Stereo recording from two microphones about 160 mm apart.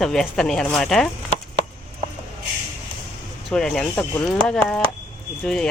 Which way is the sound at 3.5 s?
5° left (ahead or behind).